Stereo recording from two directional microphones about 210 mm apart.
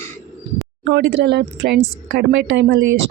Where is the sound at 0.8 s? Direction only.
55° right (ahead or behind).